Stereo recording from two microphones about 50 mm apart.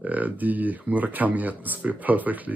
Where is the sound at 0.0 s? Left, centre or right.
Right.